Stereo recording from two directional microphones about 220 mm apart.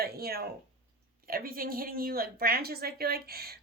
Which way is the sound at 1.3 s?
40° right (ahead or behind).